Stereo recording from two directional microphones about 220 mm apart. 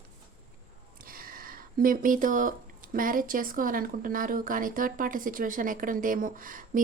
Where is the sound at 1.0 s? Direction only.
40° right (ahead or behind).